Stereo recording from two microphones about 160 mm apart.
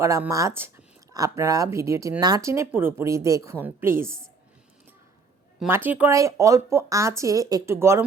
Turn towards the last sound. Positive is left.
turn(degrees=-15)  # may be behind; listen again after turning